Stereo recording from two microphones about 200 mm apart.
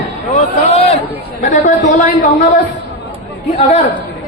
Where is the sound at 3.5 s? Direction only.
35° left (ahead or behind).